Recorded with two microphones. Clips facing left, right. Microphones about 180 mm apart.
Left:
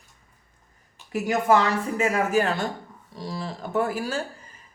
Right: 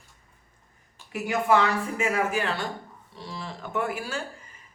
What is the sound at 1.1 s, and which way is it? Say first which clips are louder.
Speech: left 2 dB; 40° left (ahead or behind).